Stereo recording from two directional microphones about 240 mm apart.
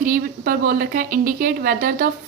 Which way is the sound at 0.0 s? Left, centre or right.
Right.